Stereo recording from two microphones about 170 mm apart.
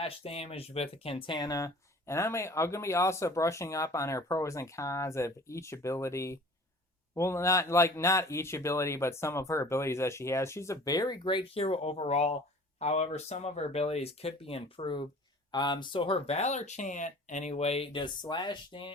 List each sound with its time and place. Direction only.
0.0 s speech: 35° left (ahead or behind)